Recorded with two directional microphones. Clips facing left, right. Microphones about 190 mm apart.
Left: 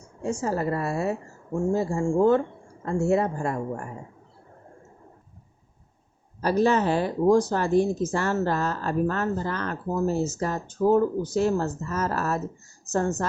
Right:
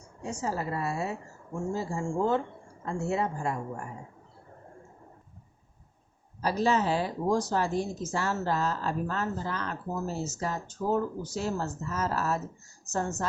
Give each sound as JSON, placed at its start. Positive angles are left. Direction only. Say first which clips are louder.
{"t": 0.2, "sound": "a woman's voice", "louder": "left 6 dB", "side_deg": 55}
{"t": 6.4, "sound": "speech", "louder": "left 5 dB", "side_deg": 60}